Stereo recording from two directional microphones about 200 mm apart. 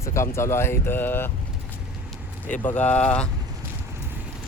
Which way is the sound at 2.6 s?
10° left (ahead or behind).